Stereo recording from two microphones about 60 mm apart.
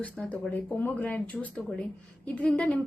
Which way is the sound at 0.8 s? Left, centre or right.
Left.